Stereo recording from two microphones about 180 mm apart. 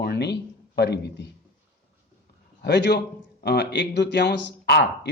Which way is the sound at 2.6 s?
65° left (ahead or behind).